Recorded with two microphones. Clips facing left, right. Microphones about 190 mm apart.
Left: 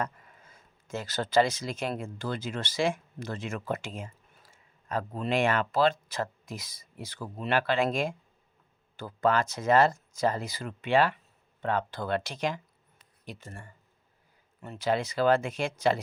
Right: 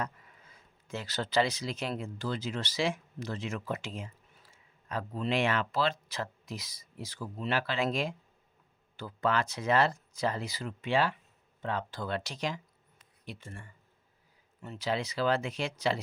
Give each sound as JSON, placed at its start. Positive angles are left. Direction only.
{"t": 0.0, "sound": "speech", "side_deg": 45}
{"t": 13.2, "sound": "speech", "side_deg": 40}
{"t": 14.6, "sound": "speech", "side_deg": 55}